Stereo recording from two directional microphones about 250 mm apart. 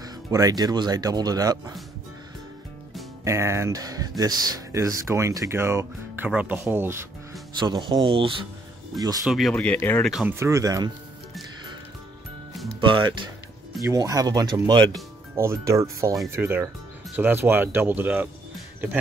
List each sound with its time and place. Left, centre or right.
0.0 s speech: centre
3.3 s speech: centre
9.2 s speech: centre
12.8 s speech: centre